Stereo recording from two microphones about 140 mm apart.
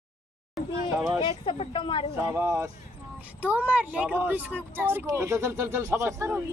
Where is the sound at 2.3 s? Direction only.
20° right (ahead or behind).